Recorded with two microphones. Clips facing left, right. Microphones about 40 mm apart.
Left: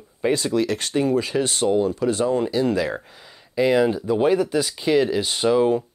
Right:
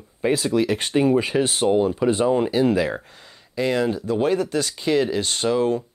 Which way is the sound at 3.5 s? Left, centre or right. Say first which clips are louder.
Left 3 dB; centre.